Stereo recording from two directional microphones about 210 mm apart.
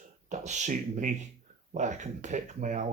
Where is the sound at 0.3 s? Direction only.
35° right (ahead or behind).